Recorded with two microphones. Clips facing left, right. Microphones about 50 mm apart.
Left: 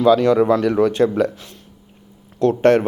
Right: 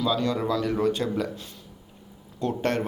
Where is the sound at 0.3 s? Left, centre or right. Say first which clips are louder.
Left 10 dB; left.